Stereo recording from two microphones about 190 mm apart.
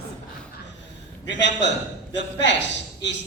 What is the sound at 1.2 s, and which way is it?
A man's voice, 70° left (ahead or behind).